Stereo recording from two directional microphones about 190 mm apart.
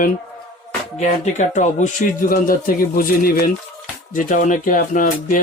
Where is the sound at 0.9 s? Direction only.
35° left (ahead or behind).